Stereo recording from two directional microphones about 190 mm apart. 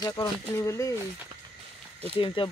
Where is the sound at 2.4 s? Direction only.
30° left (ahead or behind).